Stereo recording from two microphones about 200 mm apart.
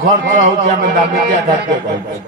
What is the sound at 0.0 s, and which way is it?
Music, 45° right (ahead or behind).